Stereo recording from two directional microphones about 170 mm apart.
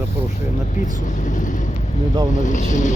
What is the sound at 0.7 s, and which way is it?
Speech, 50° left (ahead or behind).